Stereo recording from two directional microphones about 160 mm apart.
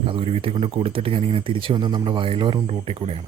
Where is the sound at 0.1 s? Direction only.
35° right (ahead or behind).